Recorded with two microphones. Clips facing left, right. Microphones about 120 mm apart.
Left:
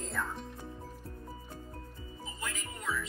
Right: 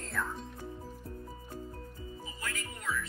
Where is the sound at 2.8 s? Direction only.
20° left (ahead or behind).